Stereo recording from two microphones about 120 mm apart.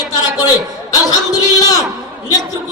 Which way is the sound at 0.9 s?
30° left (ahead or behind).